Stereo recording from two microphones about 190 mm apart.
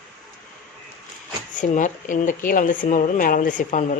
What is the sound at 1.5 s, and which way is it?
Speech, 40° left (ahead or behind).